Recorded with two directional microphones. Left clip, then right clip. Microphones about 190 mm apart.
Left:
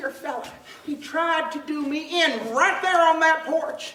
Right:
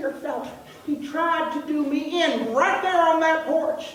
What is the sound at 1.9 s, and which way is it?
Speech, 30° left (ahead or behind).